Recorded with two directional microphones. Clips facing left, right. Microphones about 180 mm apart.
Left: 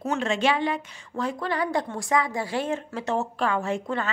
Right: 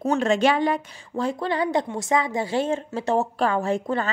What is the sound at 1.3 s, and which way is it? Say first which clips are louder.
Speech: right 3 dB; 25° right (ahead or behind).